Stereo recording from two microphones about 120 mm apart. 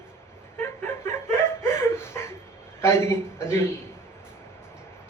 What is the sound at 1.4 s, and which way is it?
A woman's voice, 20° left (ahead or behind).